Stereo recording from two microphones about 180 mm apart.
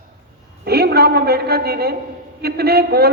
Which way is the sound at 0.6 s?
60° right (ahead or behind).